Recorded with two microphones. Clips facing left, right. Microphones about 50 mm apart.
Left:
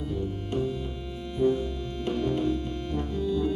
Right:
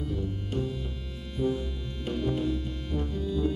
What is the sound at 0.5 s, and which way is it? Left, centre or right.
Music, centre.